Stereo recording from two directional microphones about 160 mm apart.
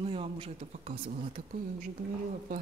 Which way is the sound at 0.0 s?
35° right (ahead or behind).